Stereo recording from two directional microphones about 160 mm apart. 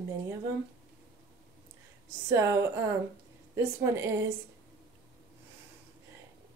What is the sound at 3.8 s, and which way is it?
Speech, 15° right (ahead or behind).